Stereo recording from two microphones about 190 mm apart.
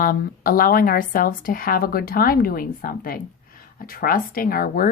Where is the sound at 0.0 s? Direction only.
50° left (ahead or behind).